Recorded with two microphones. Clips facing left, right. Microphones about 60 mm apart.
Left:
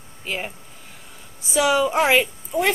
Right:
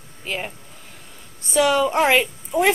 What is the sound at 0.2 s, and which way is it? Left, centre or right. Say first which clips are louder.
A woman's voice: even; centre.